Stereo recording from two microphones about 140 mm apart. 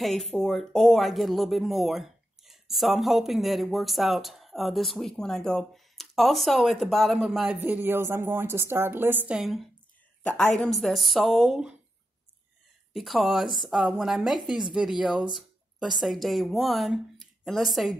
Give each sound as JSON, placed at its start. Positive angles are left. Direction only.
{"t": 0.0, "sound": "speech", "side_deg": 0}
{"t": 9.4, "sound": "speech", "side_deg": 0}
{"t": 12.9, "sound": "a woman's voice", "side_deg": 0}